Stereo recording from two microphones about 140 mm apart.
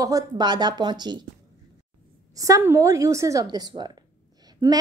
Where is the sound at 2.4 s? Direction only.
25° right (ahead or behind).